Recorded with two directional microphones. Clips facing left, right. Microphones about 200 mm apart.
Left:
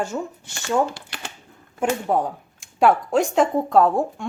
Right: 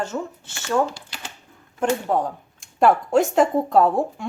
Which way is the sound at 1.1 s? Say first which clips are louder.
Left 2 dB; 60° left (ahead or behind).